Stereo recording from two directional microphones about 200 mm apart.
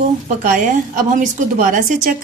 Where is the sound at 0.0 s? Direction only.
40° right (ahead or behind).